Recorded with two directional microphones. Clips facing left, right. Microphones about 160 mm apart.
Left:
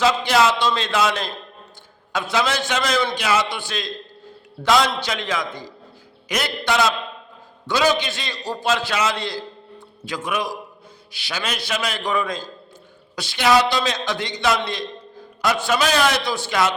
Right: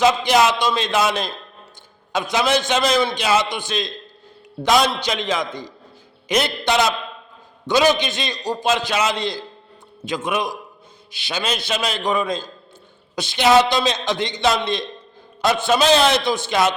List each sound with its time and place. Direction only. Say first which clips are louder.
0.0 s a man's voice: right 2 dB; 20° right (ahead or behind)